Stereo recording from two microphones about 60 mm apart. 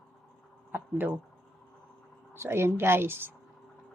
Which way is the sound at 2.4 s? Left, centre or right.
Right.